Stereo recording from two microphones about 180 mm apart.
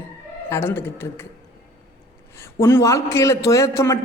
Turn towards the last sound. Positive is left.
turn(degrees=15)  # may be behind; listen again after turning